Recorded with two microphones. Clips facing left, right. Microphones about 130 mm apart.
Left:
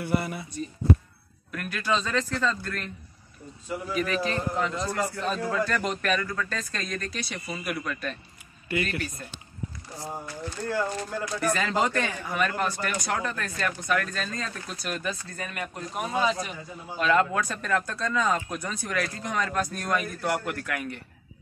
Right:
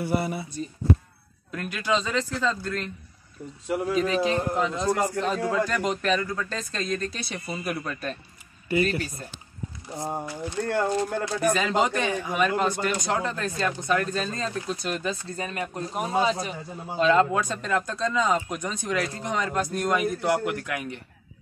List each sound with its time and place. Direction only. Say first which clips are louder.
1.5 s a man's voice: right 2 dB; 20° right (ahead or behind)
3.6 s speech: right 7 dB; 75° right (ahead or behind)
3.9 s speech: right 3 dB; 25° right (ahead or behind)
10.7 s speech: right 4 dB; 65° right (ahead or behind)
11.3 s speech: right 2 dB; 15° right (ahead or behind)